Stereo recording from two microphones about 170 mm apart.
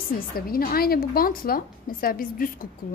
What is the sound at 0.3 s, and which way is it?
A woman's voice, 55° left (ahead or behind).